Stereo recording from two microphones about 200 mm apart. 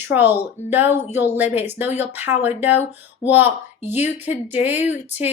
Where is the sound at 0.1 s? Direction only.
10° right (ahead or behind).